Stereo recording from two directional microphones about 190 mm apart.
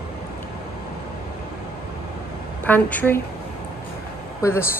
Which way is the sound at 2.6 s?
10° left (ahead or behind).